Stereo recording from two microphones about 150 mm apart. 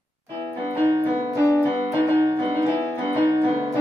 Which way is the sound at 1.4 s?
20° left (ahead or behind).